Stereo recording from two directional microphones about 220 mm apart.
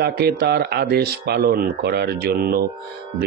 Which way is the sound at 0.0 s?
45° right (ahead or behind).